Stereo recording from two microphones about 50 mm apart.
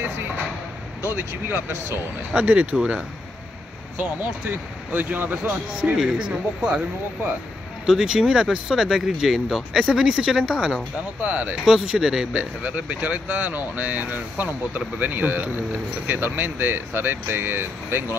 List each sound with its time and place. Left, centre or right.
2.3 s speech: right
2.7 s speech: centre
4.0 s speech: right
5.9 s speech: centre
7.8 s speech: centre
11.1 s speech: right
11.6 s speech: centre
12.3 s speech: right